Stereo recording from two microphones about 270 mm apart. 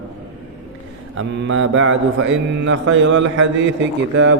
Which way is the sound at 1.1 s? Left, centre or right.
Right.